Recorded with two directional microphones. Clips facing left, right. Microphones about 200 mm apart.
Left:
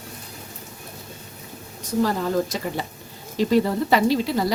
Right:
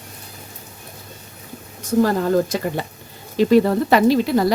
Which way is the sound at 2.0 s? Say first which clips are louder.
Right 5 dB; 50° right (ahead or behind).